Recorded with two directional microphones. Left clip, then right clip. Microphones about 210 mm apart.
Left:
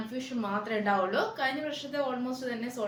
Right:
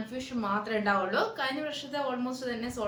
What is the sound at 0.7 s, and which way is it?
Speech, 20° right (ahead or behind).